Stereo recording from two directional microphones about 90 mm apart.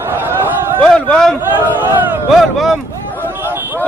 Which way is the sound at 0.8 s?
10° left (ahead or behind).